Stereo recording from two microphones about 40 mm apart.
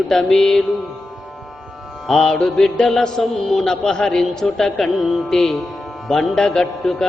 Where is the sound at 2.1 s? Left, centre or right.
Centre.